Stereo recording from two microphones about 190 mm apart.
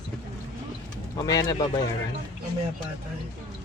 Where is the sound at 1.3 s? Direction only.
20° left (ahead or behind).